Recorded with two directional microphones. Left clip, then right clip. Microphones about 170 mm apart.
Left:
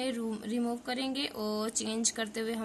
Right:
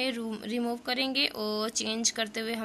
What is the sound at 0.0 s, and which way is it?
Speech, 15° right (ahead or behind).